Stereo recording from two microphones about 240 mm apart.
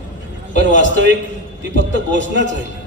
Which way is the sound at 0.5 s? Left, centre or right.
Left.